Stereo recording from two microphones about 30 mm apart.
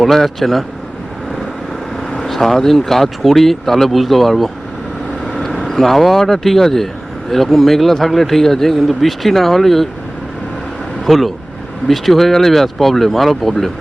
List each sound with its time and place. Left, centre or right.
0.0 s speech: centre
2.2 s speech: centre
11.0 s speech: centre